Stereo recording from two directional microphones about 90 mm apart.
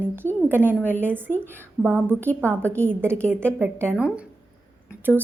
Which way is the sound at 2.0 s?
25° right (ahead or behind).